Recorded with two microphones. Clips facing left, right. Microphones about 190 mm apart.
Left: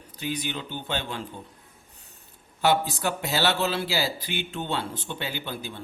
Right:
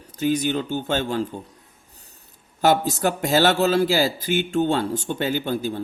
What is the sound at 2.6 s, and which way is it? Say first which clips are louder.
A man's voice: right 4 dB; 45° right (ahead or behind).